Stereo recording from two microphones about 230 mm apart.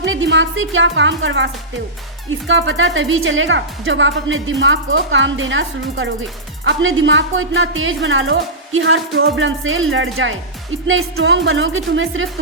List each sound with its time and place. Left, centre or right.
0.0 s a woman's voice: right
2.5 s a woman's voice: right